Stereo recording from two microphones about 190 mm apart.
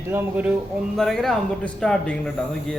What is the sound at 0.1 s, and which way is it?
Speech, 10° right (ahead or behind).